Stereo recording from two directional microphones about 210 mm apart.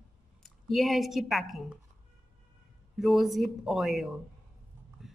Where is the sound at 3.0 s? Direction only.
Centre (ahead or behind).